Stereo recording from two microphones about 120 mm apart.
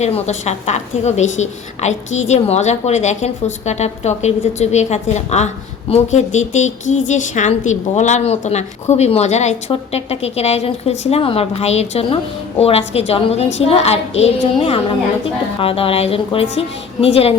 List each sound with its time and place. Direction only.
0.0 s a woman's voice: 70° left (ahead or behind)